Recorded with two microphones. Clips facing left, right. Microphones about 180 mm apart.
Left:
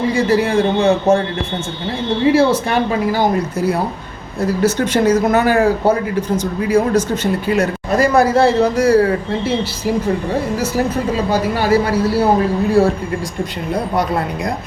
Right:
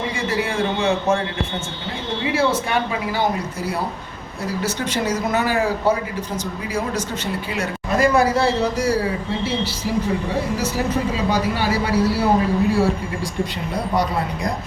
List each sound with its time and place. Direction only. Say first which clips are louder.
0.1 s a man's voice: left 9 dB; 40° left (ahead or behind)
2.2 s a man's voice: left 7 dB; 40° left (ahead or behind)
4.6 s a man's voice: left 9 dB; 50° left (ahead or behind)
11.3 s a man's voice: left 5 dB; 45° left (ahead or behind)